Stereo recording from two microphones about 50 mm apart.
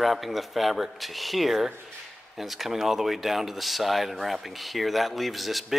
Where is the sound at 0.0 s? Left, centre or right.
Centre.